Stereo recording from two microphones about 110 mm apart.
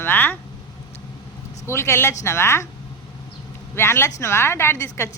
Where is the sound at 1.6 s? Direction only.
25° left (ahead or behind).